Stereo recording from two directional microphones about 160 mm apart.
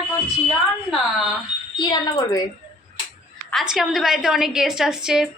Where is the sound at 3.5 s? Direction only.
Centre (ahead or behind).